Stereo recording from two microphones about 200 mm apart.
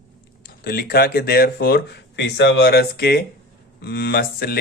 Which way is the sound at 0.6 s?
50° left (ahead or behind).